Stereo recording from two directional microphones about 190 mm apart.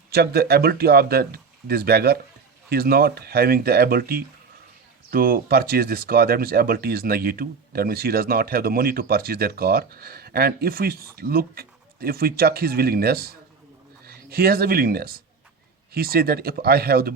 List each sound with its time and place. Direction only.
0.1 s speech: 55° right (ahead or behind)